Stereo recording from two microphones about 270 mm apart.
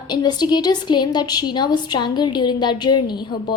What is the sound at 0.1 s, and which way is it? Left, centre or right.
A woman's voice, centre.